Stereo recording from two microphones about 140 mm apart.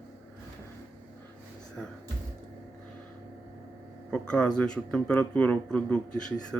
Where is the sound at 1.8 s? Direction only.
10° left (ahead or behind).